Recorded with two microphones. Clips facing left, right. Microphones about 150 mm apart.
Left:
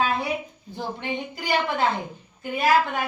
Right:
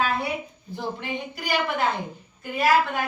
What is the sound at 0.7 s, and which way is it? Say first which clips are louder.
A woman's voice: left 1 dB; 20° left (ahead or behind).